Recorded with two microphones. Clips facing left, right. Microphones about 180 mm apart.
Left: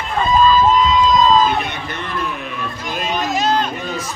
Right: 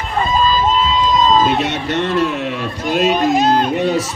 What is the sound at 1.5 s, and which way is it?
Speech, 75° right (ahead or behind).